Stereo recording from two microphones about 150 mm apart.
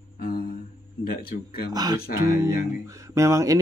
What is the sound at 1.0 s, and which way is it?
Speech, 85° left.